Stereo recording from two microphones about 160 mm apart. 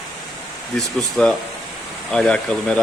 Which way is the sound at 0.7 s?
5° left (ahead or behind).